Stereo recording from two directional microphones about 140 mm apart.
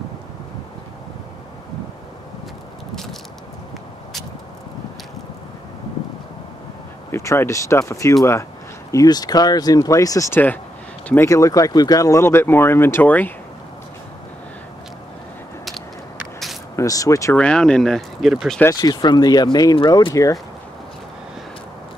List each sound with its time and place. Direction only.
7.1 s speech: 20° left (ahead or behind)
16.7 s speech: 25° left (ahead or behind)
17.3 s speech: 5° left (ahead or behind)
18.6 s speech: 25° left (ahead or behind)